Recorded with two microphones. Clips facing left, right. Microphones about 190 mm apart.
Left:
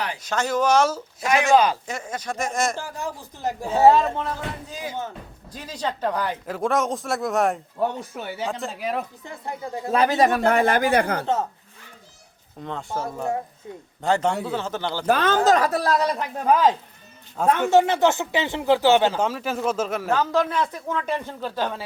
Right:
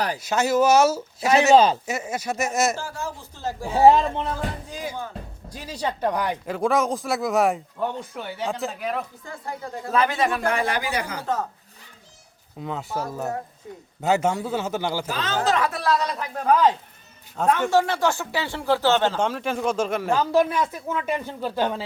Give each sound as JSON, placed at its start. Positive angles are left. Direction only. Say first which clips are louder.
{"t": 0.2, "sound": "speech", "louder": "right 3 dB", "side_deg": -10}
{"t": 1.5, "sound": "speech", "louder": "right 1 dB", "side_deg": -25}
{"t": 1.9, "sound": "speech", "louder": "right 3 dB", "side_deg": -10}
{"t": 2.8, "sound": "speech", "louder": "left 1 dB", "side_deg": 15}
{"t": 3.8, "sound": "speech", "louder": "right 1 dB", "side_deg": -20}
{"t": 5.5, "sound": "speech", "louder": "even", "side_deg": -10}
{"t": 6.4, "sound": "a man's voice", "louder": "right 2 dB", "side_deg": 0}
{"t": 9.2, "sound": "speech", "louder": "left 1 dB", "side_deg": 25}
{"t": 12.6, "sound": "a man's voice", "louder": "even", "side_deg": -5}
{"t": 15.0, "sound": "speech", "louder": "left 8 dB", "side_deg": 55}
{"t": 15.4, "sound": "speech", "louder": "even", "side_deg": 40}
{"t": 16.5, "sound": "a man's voice", "louder": "even", "side_deg": 5}
{"t": 17.7, "sound": "speech", "louder": "left 3 dB", "side_deg": 20}
{"t": 20.1, "sound": "speech", "louder": "right 2 dB", "side_deg": -10}